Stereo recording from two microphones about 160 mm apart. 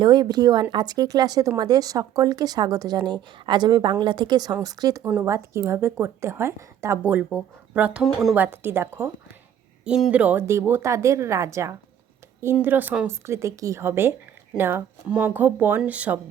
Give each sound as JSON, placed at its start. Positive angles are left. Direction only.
{"t": 0.0, "sound": "a woman's voice", "side_deg": -25}
{"t": 8.4, "sound": "a woman's voice", "side_deg": -15}